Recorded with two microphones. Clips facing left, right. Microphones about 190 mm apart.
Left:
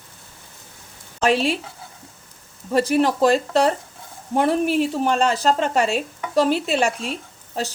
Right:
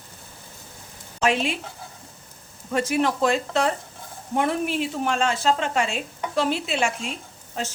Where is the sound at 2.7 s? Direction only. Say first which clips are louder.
Left 4 dB; 35° left (ahead or behind).